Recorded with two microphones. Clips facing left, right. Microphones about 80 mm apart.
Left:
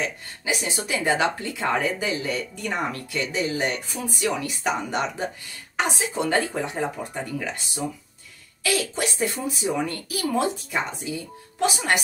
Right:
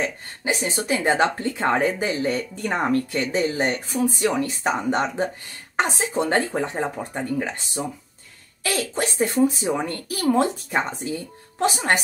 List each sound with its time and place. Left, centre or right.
0.0 s speech: right